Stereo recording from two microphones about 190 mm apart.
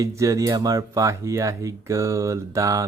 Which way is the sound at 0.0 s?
15° right (ahead or behind).